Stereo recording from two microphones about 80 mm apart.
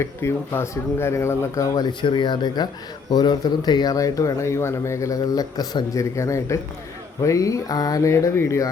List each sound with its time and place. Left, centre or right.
0.0 s speech: left
3.9 s speech: left
6.0 s speech: left
8.1 s speech: left